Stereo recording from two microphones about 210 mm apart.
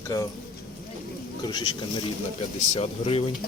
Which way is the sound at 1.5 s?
20° left (ahead or behind).